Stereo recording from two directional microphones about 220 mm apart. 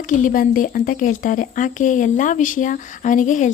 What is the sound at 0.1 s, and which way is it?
Speech, 40° left (ahead or behind).